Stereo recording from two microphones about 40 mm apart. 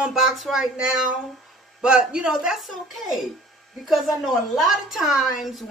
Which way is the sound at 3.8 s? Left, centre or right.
Centre.